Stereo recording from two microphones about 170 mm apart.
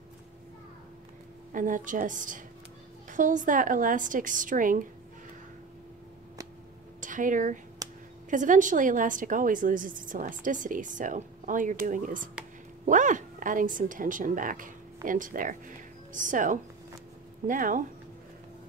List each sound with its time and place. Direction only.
1.5 s a woman's voice: 50° right (ahead or behind)
7.0 s a woman's voice: 50° right (ahead or behind)